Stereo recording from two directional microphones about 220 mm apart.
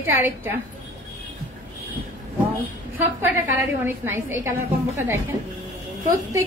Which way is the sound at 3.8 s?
10° right (ahead or behind).